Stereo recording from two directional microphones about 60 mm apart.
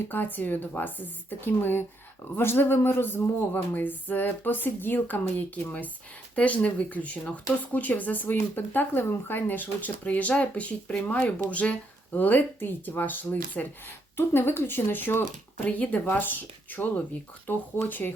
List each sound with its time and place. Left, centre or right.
0.1 s speech: left
14.2 s speech: left